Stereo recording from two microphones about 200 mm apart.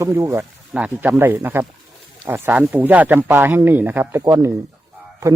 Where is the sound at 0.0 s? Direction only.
15° right (ahead or behind).